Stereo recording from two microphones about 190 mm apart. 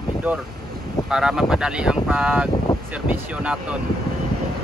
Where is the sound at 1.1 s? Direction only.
5° right (ahead or behind).